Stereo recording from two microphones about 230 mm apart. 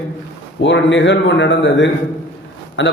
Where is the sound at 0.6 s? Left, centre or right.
Left.